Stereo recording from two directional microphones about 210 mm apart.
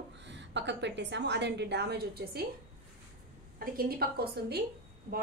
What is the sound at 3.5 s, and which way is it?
A woman's voice, 45° right (ahead or behind).